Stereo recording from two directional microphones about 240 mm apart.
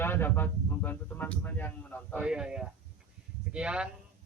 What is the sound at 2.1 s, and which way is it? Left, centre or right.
Speech, centre.